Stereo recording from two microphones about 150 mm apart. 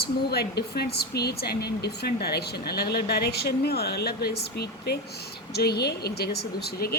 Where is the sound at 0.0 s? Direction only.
90° left.